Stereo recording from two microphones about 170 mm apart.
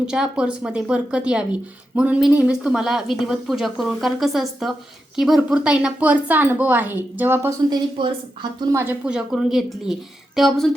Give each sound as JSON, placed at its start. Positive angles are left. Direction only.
{"t": 0.0, "sound": "a woman's voice", "side_deg": -5}
{"t": 7.7, "sound": "a woman's voice", "side_deg": -30}
{"t": 8.7, "sound": "a woman's voice", "side_deg": -15}